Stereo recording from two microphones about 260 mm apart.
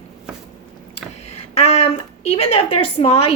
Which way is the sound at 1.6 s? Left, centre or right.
Left.